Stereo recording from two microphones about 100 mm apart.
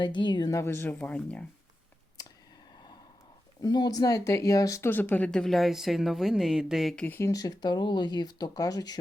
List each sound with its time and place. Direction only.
0.0 s a woman's voice: 50° left (ahead or behind)
0.5 s speech: 30° left (ahead or behind)
3.6 s speech: 45° left (ahead or behind)
4.9 s a woman's voice: 20° left (ahead or behind); by 6.9 s 5° right (ahead or behind)
6.9 s speech: 20° left (ahead or behind)
7.3 s speech: 35° left (ahead or behind)